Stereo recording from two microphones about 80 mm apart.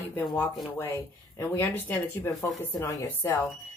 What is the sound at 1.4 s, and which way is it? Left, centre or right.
A woman's voice, left.